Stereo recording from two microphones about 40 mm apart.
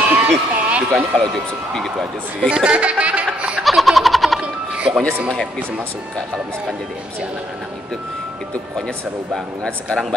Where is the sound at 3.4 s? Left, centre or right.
Right.